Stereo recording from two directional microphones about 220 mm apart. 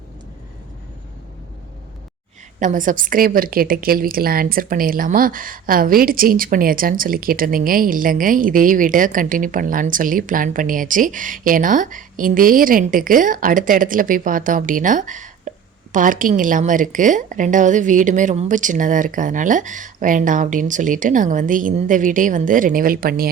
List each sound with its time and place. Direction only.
2.6 s a woman's voice: 35° right (ahead or behind)